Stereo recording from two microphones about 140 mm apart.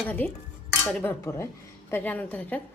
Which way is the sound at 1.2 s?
20° left (ahead or behind).